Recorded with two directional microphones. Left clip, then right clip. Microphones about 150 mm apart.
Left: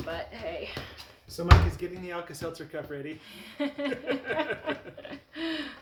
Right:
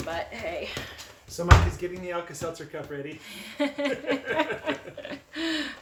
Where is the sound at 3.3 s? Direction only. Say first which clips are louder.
Right 6 dB; 30° right (ahead or behind).